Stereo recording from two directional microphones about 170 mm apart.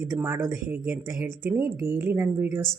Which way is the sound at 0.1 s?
15° right (ahead or behind).